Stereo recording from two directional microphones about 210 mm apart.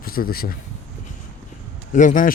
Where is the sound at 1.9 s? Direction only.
35° left (ahead or behind).